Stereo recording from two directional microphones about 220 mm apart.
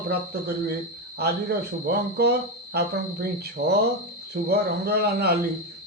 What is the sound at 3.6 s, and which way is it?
Speech, 30° right (ahead or behind).